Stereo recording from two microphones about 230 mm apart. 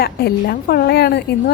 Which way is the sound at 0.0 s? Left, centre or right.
Left.